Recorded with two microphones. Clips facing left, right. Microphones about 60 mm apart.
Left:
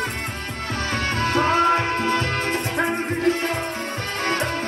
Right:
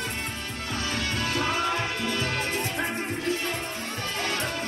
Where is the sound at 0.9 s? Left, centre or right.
Left.